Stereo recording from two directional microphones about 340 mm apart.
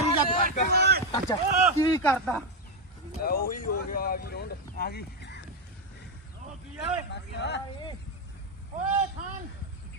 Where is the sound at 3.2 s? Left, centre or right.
Left.